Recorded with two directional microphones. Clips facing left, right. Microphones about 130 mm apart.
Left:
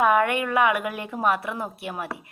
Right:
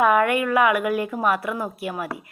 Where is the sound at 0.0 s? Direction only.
30° left (ahead or behind).